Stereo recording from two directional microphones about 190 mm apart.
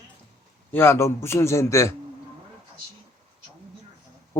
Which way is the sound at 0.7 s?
10° left (ahead or behind).